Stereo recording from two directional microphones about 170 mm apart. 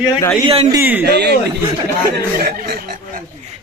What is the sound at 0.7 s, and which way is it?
Speech, 10° right (ahead or behind).